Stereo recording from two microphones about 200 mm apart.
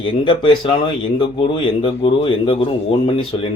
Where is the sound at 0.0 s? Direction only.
25° left (ahead or behind).